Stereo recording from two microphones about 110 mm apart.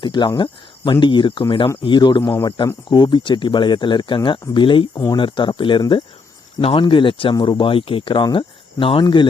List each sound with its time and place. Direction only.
0.0 s speech: 45° left (ahead or behind)